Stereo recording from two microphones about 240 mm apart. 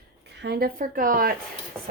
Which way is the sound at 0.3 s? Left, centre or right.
Right.